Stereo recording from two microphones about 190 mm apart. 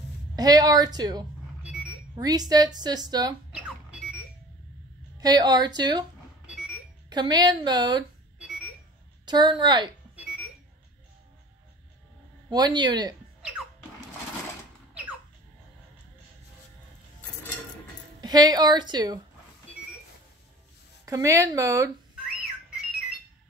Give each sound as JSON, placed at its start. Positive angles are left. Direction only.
{"t": 0.4, "sound": "a woman's voice", "side_deg": -20}
{"t": 1.6, "sound": "a sound", "side_deg": -5}
{"t": 2.1, "sound": "a woman's voice", "side_deg": -20}
{"t": 3.5, "sound": "a sound", "side_deg": -5}
{"t": 5.2, "sound": "a woman's voice", "side_deg": -20}
{"t": 6.4, "sound": "alarm clock", "side_deg": -5}
{"t": 7.1, "sound": "a woman's voice", "side_deg": -20}
{"t": 8.4, "sound": "alarm clock", "side_deg": -5}
{"t": 9.2, "sound": "a woman's voice", "side_deg": -25}
{"t": 12.4, "sound": "a woman's voice", "side_deg": -25}
{"t": 18.2, "sound": "a woman's voice", "side_deg": -20}
{"t": 21.0, "sound": "speech", "side_deg": -15}